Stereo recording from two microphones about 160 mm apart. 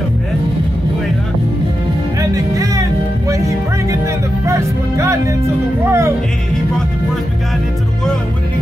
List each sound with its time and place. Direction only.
2.3 s music: 20° right (ahead or behind)
4.5 s speech: 20° right (ahead or behind)